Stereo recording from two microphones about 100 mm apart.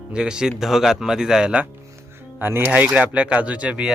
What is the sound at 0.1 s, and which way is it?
Speech, 5° right (ahead or behind).